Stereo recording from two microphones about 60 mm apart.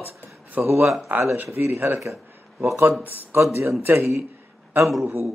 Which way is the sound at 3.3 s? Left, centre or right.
Right.